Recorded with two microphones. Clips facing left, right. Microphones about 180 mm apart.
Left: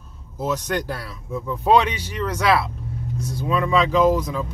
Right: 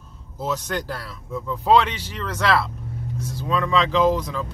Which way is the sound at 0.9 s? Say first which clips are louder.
Left 1 dB; 15° left (ahead or behind).